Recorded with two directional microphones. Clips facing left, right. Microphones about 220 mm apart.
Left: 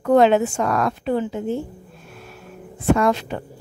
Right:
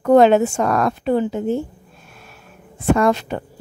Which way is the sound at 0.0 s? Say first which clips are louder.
Right 3 dB; 45° right (ahead or behind).